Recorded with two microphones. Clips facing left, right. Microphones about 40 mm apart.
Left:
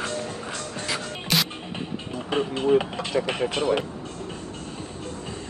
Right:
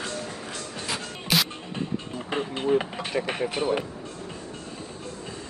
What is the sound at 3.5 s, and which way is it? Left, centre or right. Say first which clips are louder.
Speech: left 2 dB; left.